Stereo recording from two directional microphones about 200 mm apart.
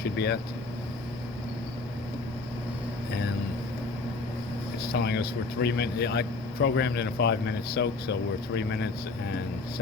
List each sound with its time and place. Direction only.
0.0 s a man's voice: 55° left (ahead or behind)
4.9 s a man's voice: 55° left (ahead or behind)